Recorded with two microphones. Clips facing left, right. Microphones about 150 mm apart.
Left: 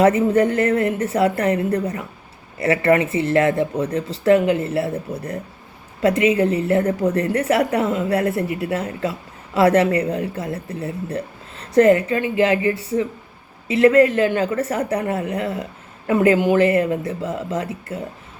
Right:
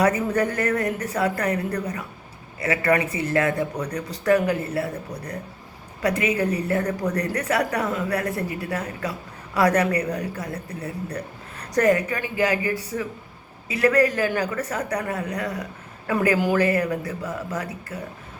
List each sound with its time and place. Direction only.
0.0 s speech: 25° left (ahead or behind)